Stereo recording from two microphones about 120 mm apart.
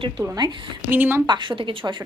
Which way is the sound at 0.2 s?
35° right (ahead or behind).